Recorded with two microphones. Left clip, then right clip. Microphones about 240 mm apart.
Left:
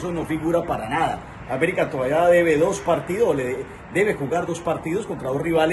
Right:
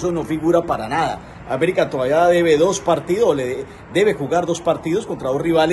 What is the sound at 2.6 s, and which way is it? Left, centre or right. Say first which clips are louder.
A man's voice: right 4 dB; centre.